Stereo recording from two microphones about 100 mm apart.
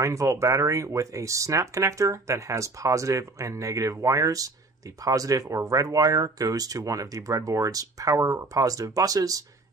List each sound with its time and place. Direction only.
0.0 s speech: 30° right (ahead or behind)